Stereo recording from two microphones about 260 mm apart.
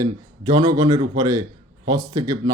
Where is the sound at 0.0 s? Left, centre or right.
Centre.